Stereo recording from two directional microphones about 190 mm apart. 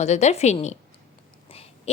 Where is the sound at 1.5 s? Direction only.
30° left (ahead or behind).